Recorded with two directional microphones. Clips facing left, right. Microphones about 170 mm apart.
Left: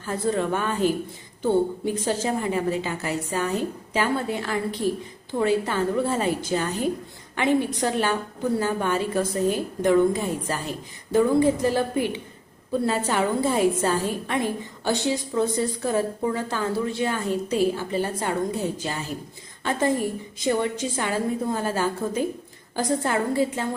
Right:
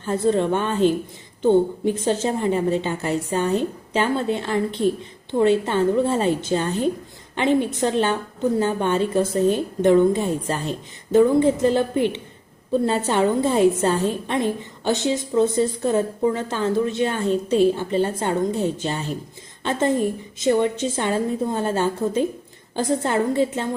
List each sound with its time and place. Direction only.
0.0 s a woman's voice: 25° right (ahead or behind)